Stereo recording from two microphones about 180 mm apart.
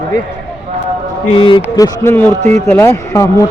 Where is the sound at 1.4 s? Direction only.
30° left (ahead or behind).